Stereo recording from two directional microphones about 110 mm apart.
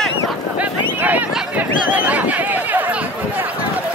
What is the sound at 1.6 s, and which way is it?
Chatter, 15° right (ahead or behind).